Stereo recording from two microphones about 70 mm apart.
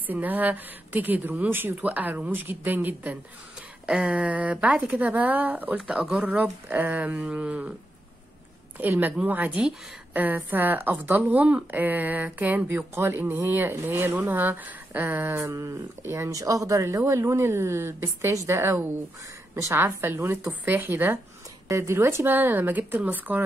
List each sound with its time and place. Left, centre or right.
0.0 s speech: right
3.8 s speech: centre
5.8 s speech: centre
8.7 s speech: right
12.6 s a woman's voice: right
15.5 s a woman's voice: right
21.6 s speech: right